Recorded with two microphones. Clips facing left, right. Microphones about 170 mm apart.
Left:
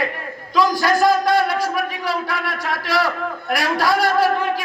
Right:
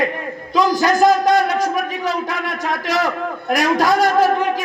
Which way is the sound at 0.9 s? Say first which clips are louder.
Right 4 dB; 45° right (ahead or behind).